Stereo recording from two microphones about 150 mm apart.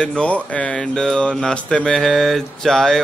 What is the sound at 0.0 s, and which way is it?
Speech, 5° left (ahead or behind).